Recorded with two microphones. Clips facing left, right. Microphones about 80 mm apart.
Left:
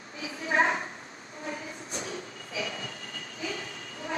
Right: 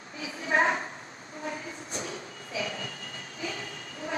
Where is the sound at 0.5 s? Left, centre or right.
Right.